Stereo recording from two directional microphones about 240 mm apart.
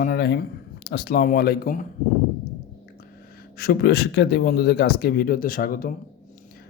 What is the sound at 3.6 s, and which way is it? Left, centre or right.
A man's voice, left.